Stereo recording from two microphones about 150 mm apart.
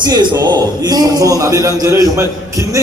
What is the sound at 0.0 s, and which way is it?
A man's voice, 30° right (ahead or behind).